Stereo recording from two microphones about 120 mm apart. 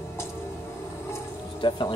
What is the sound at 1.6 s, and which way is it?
Speech, 45° left (ahead or behind).